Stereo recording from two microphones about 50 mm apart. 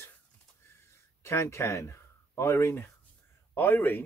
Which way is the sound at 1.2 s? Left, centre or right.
Left.